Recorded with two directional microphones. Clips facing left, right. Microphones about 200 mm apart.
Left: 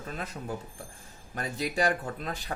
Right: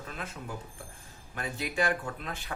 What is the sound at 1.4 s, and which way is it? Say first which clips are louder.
Speech: left 2 dB; 40° left (ahead or behind).